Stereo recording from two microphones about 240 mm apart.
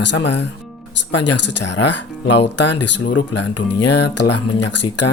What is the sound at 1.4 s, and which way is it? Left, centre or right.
Speech, left.